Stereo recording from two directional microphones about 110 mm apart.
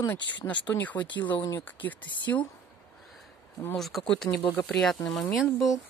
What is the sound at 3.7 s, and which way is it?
Speech, centre (ahead or behind).